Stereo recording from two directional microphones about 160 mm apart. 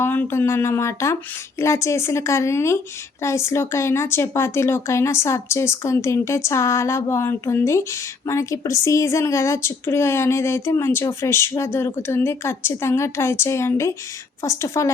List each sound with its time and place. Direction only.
0.0 s a woman's voice: 15° left (ahead or behind)